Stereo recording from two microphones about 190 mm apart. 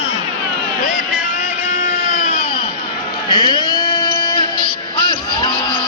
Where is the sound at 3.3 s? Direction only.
20° left (ahead or behind).